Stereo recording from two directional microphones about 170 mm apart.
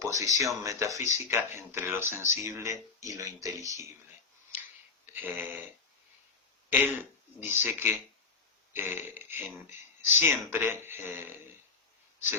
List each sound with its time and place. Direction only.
0.0 s speech: 20° right (ahead or behind)
5.1 s speech: 10° right (ahead or behind)
6.7 s speech: 10° right (ahead or behind)